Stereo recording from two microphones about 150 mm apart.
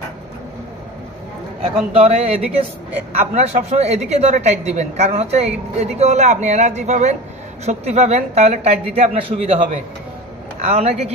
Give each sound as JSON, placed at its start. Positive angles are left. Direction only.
{"t": 2.0, "sound": "a woman's voice", "side_deg": -45}